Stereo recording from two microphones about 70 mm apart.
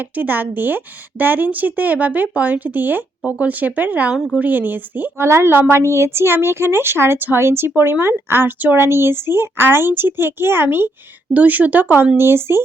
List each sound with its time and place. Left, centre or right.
0.2 s speech: right
5.2 s speech: right